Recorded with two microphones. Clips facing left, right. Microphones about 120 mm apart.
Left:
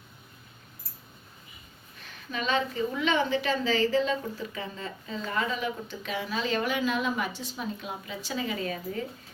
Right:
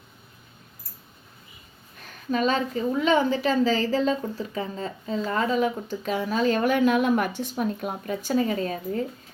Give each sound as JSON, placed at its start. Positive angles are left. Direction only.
{"t": 2.3, "sound": "a woman's voice", "side_deg": -40}